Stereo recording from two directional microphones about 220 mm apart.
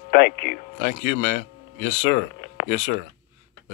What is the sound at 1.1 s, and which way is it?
Speech, 35° left (ahead or behind).